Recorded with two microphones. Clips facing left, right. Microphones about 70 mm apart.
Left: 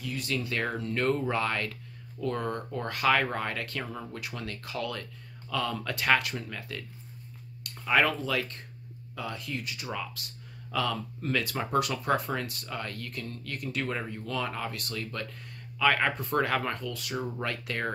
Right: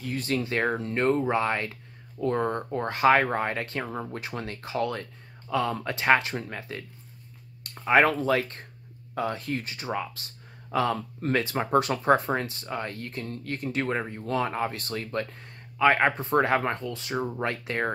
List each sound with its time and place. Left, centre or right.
0.0 s speech: right